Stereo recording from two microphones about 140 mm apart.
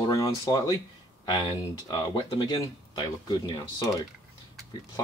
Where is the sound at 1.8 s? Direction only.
30° left (ahead or behind).